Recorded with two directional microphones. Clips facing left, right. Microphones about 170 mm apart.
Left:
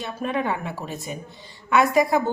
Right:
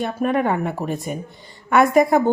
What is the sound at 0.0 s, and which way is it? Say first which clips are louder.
A woman's voice: right 6 dB; 50° right (ahead or behind).